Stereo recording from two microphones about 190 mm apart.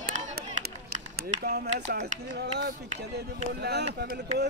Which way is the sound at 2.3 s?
60° right (ahead or behind).